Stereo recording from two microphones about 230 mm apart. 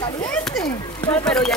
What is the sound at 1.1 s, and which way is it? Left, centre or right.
Speech, centre.